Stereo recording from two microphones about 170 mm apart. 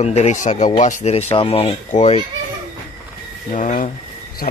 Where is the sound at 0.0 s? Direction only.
40° left (ahead or behind).